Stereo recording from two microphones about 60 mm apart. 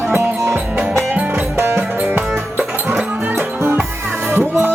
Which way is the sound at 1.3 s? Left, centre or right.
Right.